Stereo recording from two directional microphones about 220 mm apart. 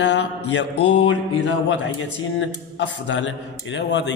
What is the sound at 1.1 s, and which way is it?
Mantra, 90° left.